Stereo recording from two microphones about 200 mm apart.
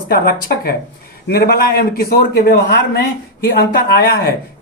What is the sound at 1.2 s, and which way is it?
Speech, 50° left (ahead or behind).